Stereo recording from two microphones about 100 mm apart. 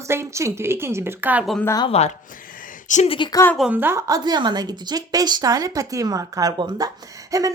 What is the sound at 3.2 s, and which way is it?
Speech, 55° left (ahead or behind).